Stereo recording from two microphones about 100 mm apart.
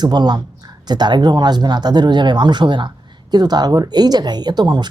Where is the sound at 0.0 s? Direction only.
45° right (ahead or behind).